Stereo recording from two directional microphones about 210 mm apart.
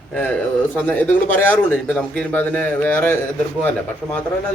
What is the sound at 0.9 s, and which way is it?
A man's voice, 10° left (ahead or behind).